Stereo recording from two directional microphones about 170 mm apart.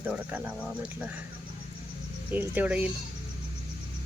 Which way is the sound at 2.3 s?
10° right (ahead or behind).